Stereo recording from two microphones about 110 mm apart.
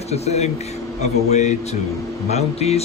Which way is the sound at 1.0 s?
90° left.